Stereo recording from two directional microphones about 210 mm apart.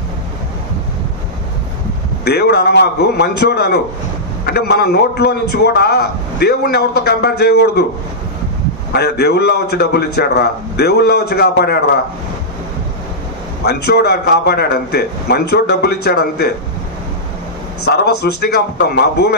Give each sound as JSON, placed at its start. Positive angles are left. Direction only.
{"t": 2.2, "sound": "a man's voice", "side_deg": 50}
{"t": 8.9, "sound": "a man's voice", "side_deg": 50}
{"t": 13.7, "sound": "a man's voice", "side_deg": 50}
{"t": 17.8, "sound": "a man's voice", "side_deg": 50}